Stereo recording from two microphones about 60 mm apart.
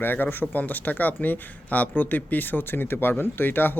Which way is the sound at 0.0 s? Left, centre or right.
Left.